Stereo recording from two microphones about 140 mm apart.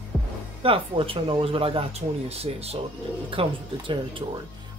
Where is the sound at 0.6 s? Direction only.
40° right (ahead or behind).